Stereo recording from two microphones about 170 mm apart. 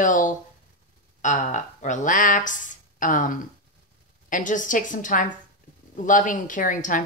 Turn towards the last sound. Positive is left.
turn(degrees=50)  # may be behind; listen again after turning